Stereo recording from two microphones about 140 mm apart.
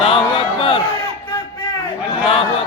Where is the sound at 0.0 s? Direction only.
40° left (ahead or behind).